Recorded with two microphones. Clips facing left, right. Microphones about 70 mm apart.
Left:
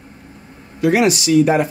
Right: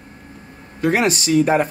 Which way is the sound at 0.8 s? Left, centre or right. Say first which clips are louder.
Left 3 dB; right.